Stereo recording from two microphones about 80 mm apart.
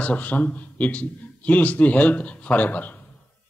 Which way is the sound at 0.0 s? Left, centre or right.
Centre.